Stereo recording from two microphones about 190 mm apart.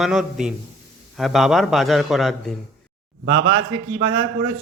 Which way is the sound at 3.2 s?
90° right.